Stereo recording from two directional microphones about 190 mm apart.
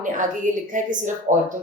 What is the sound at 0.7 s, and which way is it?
Speech, 40° right (ahead or behind).